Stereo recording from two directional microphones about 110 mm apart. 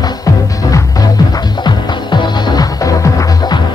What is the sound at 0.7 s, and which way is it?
Music, 30° left (ahead or behind).